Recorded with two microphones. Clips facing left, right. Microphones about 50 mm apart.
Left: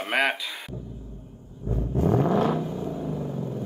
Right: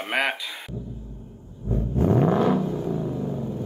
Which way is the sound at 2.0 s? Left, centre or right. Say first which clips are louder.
Right 2 dB; right.